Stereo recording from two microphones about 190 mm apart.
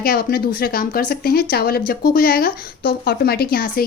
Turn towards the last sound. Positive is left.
turn(degrees=50)  # may be behind; listen again after turning